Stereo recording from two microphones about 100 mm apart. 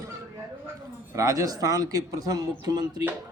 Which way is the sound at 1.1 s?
35° right (ahead or behind).